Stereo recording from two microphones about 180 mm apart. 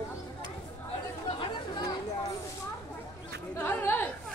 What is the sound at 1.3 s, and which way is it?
Speech, 25° left (ahead or behind).